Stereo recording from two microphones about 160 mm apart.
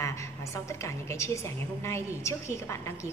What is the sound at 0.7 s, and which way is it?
A woman's voice, 15° left (ahead or behind).